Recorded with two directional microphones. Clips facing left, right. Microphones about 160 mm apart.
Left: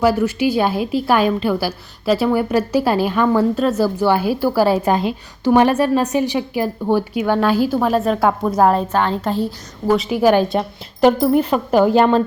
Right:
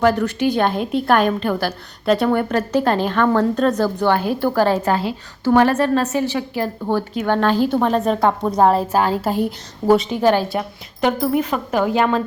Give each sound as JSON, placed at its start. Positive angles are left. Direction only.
{"t": 0.0, "sound": "a woman's voice", "side_deg": 5}
{"t": 10.0, "sound": "a woman's voice", "side_deg": 10}
{"t": 11.0, "sound": "speech", "side_deg": 30}
{"t": 11.7, "sound": "a woman's voice", "side_deg": 0}
{"t": 11.9, "sound": "speech", "side_deg": 30}